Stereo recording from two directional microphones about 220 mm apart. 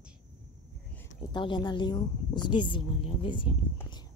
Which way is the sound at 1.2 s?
20° left (ahead or behind).